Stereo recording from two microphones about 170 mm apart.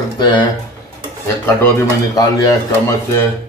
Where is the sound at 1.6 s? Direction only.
20° left (ahead or behind).